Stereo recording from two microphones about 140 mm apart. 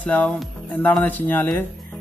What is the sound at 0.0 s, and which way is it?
Speech, 10° left (ahead or behind).